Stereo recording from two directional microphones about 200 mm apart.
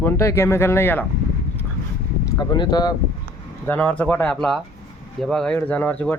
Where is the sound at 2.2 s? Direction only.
20° left (ahead or behind).